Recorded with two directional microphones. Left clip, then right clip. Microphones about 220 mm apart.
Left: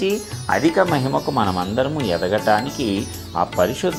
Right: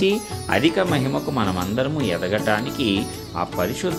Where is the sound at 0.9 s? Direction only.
Centre (ahead or behind).